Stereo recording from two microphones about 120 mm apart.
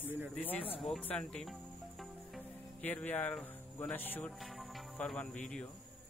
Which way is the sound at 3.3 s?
10° left (ahead or behind).